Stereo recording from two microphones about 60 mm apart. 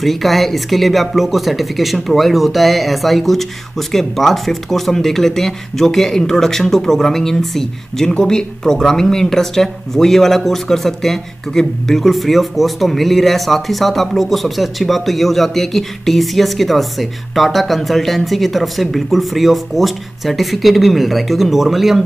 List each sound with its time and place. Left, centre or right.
0.0 s speech: centre